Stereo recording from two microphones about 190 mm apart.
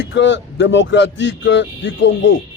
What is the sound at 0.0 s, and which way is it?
Speech, 70° left (ahead or behind).